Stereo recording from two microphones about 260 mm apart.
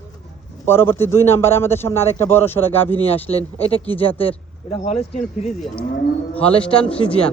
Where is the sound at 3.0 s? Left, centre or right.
Left.